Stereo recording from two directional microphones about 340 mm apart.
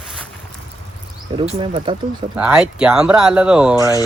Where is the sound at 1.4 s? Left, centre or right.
Centre.